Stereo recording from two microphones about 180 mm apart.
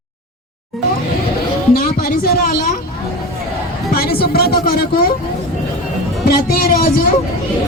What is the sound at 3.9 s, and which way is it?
A woman's voice, 55° left (ahead or behind).